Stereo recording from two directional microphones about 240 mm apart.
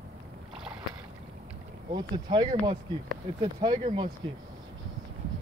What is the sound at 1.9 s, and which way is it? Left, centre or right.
Speech, centre.